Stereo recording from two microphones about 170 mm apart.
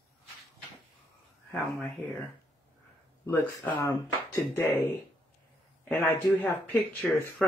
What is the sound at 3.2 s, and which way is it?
Speech, 15° left (ahead or behind).